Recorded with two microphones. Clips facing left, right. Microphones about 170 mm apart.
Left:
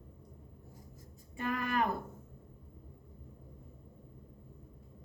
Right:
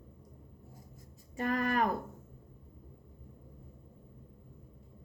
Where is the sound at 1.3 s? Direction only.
40° right (ahead or behind).